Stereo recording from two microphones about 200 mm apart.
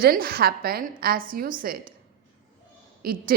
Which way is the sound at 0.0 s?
50° right (ahead or behind).